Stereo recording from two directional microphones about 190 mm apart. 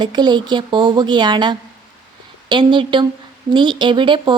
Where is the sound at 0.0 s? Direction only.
25° right (ahead or behind).